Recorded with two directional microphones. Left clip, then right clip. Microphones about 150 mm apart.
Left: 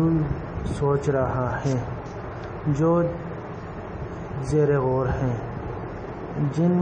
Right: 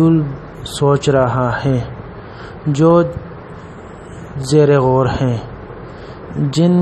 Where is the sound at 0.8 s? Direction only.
55° right (ahead or behind).